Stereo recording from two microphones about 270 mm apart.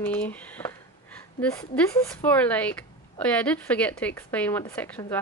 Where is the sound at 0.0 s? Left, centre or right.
Centre.